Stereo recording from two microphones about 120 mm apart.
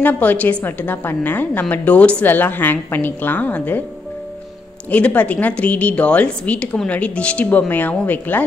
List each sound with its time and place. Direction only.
0.0 s a woman's voice: 15° left (ahead or behind)
4.9 s a woman's voice: 10° left (ahead or behind)